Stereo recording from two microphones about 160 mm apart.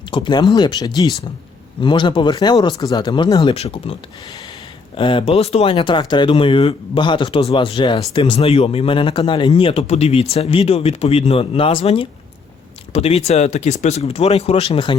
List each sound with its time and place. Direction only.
0.1 s speech: 30° left (ahead or behind)
3.5 s speech: 40° left (ahead or behind)
4.9 s speech: 30° left (ahead or behind)